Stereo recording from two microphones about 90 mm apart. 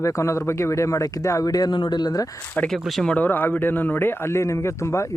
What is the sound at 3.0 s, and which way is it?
Speech, 20° left (ahead or behind).